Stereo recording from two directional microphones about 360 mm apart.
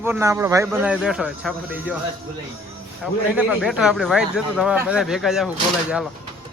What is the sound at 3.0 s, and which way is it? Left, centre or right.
A man's voice, centre.